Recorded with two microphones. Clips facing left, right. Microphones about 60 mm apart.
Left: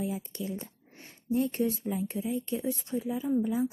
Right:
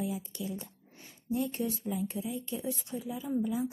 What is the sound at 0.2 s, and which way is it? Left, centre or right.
Speech, left.